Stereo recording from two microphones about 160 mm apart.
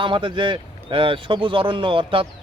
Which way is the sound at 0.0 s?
30° right (ahead or behind).